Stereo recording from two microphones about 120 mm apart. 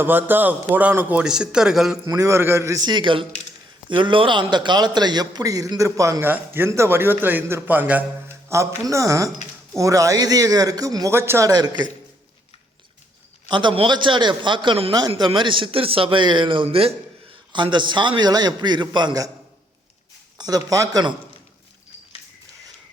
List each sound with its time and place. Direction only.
0.0 s a man's voice: 15° right (ahead or behind)
2.0 s a man's voice: 30° right (ahead or behind)
13.5 s a man's voice: 40° right (ahead or behind)
17.5 s a man's voice: 40° right (ahead or behind)
20.4 s a man's voice: 30° right (ahead or behind)